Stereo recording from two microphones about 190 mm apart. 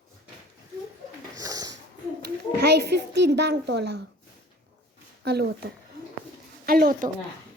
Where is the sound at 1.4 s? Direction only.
20° right (ahead or behind).